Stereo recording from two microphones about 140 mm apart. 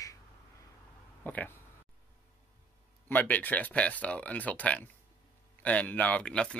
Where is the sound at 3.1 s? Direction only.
10° left (ahead or behind).